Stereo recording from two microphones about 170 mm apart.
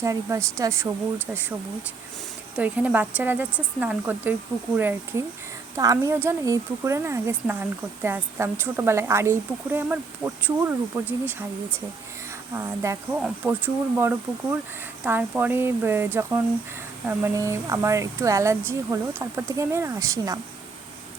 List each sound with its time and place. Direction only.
0.0 s a woman's voice: 15° right (ahead or behind)
2.6 s a woman's voice: 10° right (ahead or behind)
12.5 s a woman's voice: 15° right (ahead or behind)